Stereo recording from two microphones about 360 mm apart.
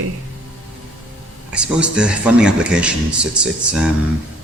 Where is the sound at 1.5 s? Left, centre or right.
Centre.